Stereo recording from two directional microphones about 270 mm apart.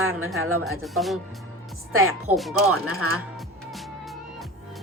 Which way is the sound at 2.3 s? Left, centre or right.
Centre.